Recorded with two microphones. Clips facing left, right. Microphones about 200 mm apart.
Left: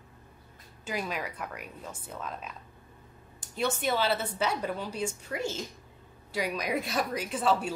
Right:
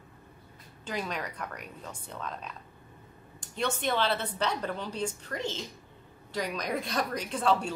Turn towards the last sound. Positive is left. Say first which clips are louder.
# even
turn(degrees=5)  # may be behind; listen again after turning